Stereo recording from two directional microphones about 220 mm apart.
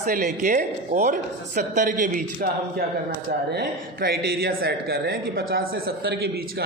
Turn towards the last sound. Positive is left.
turn(degrees=-50)  # may be behind; listen again after turning